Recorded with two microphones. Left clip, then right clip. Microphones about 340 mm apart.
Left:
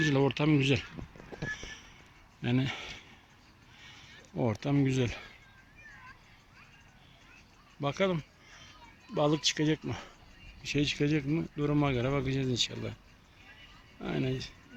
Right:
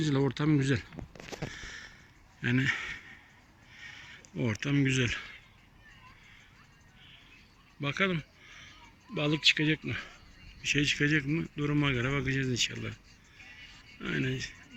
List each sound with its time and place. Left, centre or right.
0.0 s speech: centre
1.5 s a sound: centre
3.8 s crow: centre
7.8 s a sound: centre
9.1 s speech: centre
14.0 s speech: centre